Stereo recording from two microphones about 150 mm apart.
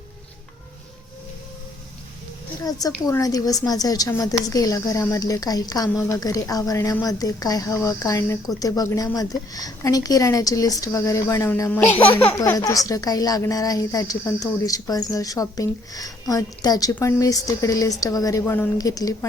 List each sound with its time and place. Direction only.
2.6 s a woman's voice: 25° left (ahead or behind)